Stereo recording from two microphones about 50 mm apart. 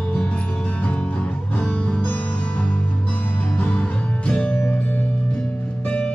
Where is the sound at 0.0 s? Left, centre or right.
Left.